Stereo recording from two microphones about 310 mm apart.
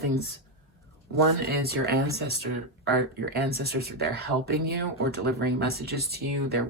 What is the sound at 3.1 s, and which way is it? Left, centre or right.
Speech, right.